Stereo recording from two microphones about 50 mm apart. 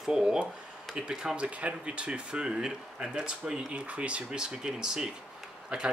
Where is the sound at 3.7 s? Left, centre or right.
Right.